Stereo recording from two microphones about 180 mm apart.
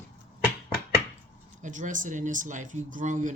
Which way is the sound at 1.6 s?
45° right (ahead or behind).